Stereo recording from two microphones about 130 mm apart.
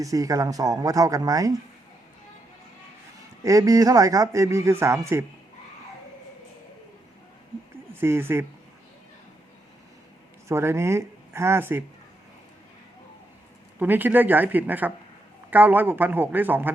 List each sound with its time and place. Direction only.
0.0 s speech: 25° right (ahead or behind)
3.4 s speech: 25° right (ahead or behind)
7.9 s speech: 20° right (ahead or behind)
10.5 s speech: 20° right (ahead or behind)
13.7 s a man's voice: 15° right (ahead or behind)